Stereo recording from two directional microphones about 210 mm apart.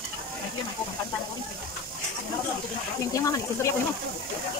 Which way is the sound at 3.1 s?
15° left (ahead or behind).